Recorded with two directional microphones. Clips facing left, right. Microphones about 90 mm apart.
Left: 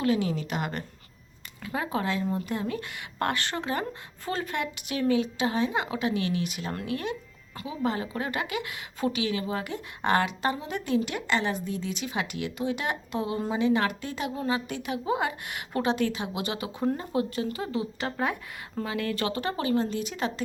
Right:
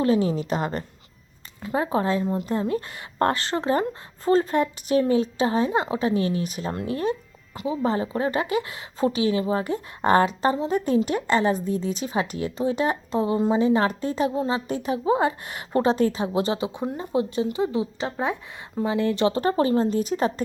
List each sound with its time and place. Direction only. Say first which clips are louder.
0.0 s a woman's voice: right 5 dB; 35° right (ahead or behind)
19.4 s a woman's voice: right 6 dB; 35° right (ahead or behind)